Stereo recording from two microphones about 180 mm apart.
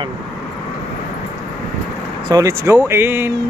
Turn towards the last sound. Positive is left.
turn(degrees=-10)  # may be behind; listen again after turning